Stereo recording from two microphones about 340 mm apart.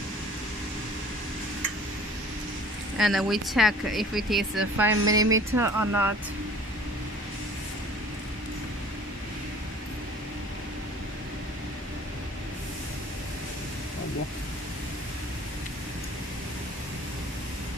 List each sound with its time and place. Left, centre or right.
3.0 s speech: centre
5.0 s speech: right
5.6 s speech: centre